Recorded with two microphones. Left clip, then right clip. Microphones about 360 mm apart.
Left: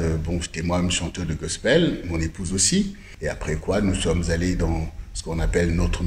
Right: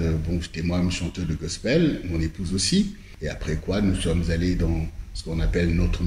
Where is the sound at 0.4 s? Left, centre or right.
Centre.